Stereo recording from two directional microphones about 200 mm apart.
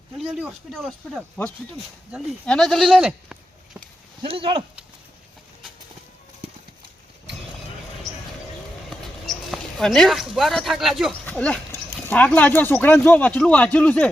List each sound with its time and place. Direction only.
0.2 s speech: 5° right (ahead or behind)
4.2 s speech: 25° right (ahead or behind)
8.9 s speech: centre (ahead or behind)